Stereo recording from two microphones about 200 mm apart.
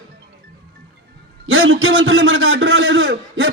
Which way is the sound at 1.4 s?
70° right (ahead or behind).